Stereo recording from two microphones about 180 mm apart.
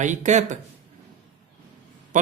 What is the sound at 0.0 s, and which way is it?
Speech, 40° right (ahead or behind).